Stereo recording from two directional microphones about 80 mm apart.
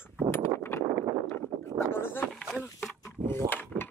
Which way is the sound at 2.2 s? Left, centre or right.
Centre.